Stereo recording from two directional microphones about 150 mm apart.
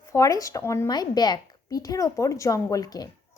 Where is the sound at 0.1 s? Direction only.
20° left (ahead or behind).